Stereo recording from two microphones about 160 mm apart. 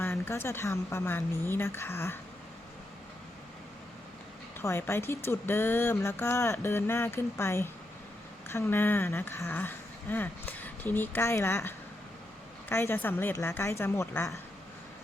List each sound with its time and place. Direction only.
0.0 s speech: 15° left (ahead or behind)
4.6 s speech: 15° left (ahead or behind)